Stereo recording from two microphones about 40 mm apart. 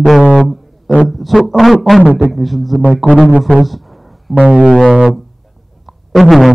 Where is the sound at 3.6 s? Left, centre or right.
Centre.